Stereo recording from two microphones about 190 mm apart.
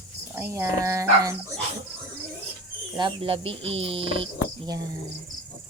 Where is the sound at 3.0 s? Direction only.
25° right (ahead or behind).